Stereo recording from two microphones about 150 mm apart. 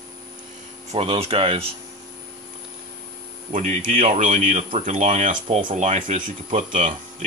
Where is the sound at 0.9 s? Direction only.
40° right (ahead or behind).